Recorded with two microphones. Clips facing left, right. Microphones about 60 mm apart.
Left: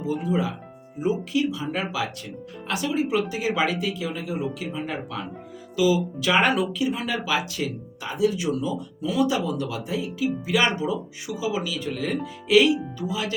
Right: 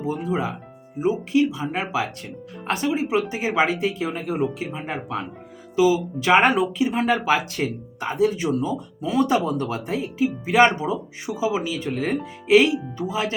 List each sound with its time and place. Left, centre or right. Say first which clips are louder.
0.0 s speech: even; right
2.9 s speech: right 1 dB; right
4.6 s speech: right 1 dB; right
6.9 s speech: right 5 dB; right